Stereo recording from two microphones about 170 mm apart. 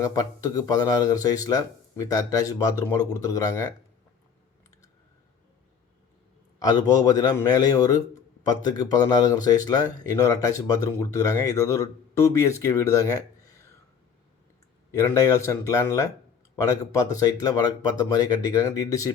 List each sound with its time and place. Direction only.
0.0 s speech: 20° left (ahead or behind)
6.6 s speech: 25° left (ahead or behind)
14.9 s speech: 20° left (ahead or behind)